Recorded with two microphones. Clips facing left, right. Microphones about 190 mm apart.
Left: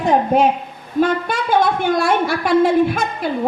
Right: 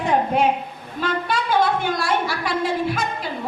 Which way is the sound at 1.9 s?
55° left (ahead or behind).